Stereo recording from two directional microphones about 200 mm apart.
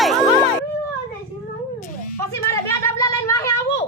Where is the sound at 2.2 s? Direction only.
15° left (ahead or behind).